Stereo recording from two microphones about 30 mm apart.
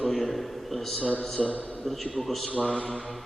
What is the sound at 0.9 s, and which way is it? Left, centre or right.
Speech, left.